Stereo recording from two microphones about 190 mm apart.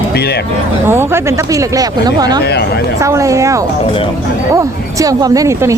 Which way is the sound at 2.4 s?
60° left (ahead or behind).